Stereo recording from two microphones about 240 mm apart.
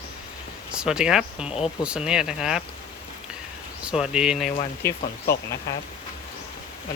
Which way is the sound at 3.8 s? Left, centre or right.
Centre.